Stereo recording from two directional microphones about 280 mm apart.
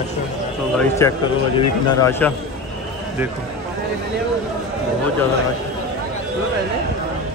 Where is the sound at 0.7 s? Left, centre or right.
Centre.